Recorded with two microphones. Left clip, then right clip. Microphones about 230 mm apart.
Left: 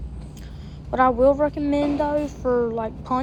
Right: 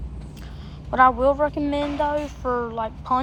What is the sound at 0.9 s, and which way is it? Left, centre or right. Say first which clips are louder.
A woman's voice: even; right.